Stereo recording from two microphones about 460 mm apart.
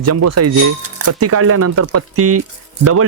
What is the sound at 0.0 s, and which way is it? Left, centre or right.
Speech, right.